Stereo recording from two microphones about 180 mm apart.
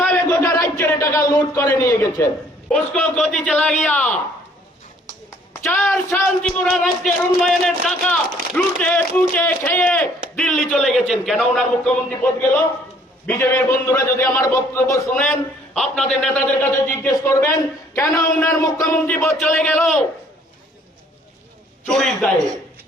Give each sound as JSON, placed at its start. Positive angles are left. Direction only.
{"t": 0.0, "sound": "a sound", "side_deg": 10}
{"t": 1.6, "sound": "a man's voice", "side_deg": 15}
{"t": 2.6, "sound": "a man's voice", "side_deg": 5}
{"t": 5.6, "sound": "a man's voice", "side_deg": 5}
{"t": 13.2, "sound": "a man's voice", "side_deg": 15}
{"t": 15.1, "sound": "a man's voice", "side_deg": 5}
{"t": 21.8, "sound": "speech", "side_deg": 5}